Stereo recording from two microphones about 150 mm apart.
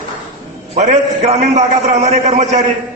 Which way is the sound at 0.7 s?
50° right (ahead or behind).